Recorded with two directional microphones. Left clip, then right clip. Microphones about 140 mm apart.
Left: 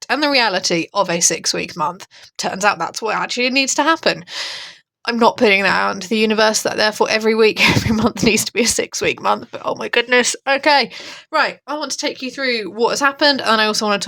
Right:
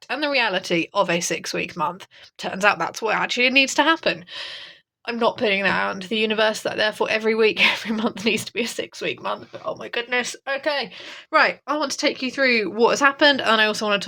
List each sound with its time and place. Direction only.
0.1 s speech: 45° left (ahead or behind); by 3.9 s 20° left (ahead or behind)
4.0 s speech: 50° left (ahead or behind)
9.0 s speech: 55° left (ahead or behind); by 10.8 s 80° left
11.3 s a woman's voice: 5° left (ahead or behind)
11.7 s speech: 10° right (ahead or behind); by 14.0 s 30° left (ahead or behind)